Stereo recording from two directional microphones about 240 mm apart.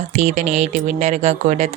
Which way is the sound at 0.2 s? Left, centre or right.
Right.